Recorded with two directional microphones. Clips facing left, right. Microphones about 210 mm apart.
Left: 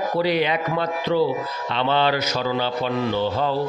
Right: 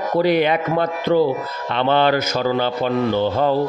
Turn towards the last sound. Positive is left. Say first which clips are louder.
# right 4 dB
turn(degrees=-50)  # may be behind; listen again after turning